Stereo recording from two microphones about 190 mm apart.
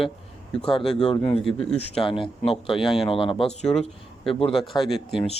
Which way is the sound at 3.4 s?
5° left (ahead or behind).